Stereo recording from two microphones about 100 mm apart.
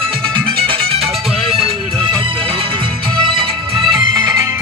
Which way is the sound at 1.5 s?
70° right (ahead or behind).